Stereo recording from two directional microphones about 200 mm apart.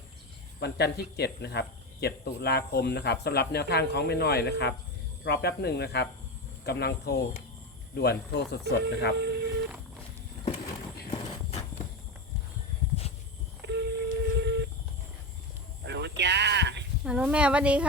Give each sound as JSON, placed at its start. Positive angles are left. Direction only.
{"t": 0.6, "sound": "speech", "side_deg": 55}
{"t": 9.1, "sound": "a sound", "side_deg": -60}
{"t": 11.1, "sound": "horse", "side_deg": 25}
{"t": 13.0, "sound": "wild animals", "side_deg": 30}
{"t": 13.6, "sound": "telephone dialing", "side_deg": -60}
{"t": 15.8, "sound": "a sound", "side_deg": -60}
{"t": 17.0, "sound": "speech", "side_deg": -5}